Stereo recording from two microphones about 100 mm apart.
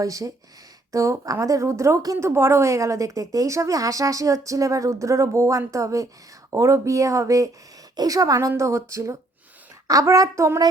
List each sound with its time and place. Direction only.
0.0 s a woman's voice: 35° right (ahead or behind)